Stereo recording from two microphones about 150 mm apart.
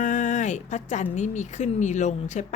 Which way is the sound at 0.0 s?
55° left (ahead or behind).